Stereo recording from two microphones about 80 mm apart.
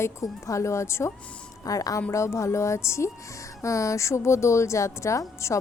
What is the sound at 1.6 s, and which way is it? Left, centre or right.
A woman's voice, left.